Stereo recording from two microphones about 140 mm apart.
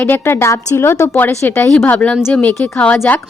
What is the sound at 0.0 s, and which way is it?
A woman's voice, 15° left (ahead or behind).